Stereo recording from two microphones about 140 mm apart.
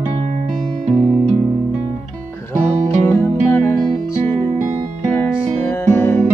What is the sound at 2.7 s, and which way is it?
Music, 55° right (ahead or behind).